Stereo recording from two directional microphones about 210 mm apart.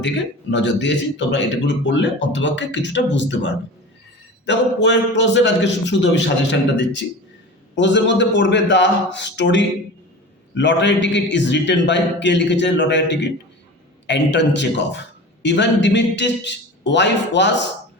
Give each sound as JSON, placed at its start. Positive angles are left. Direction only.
{"t": 0.5, "sound": "a man's voice", "side_deg": 55}